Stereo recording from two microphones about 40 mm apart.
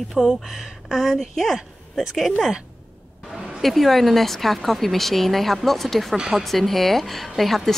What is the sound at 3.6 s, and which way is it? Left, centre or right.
A woman's voice, centre.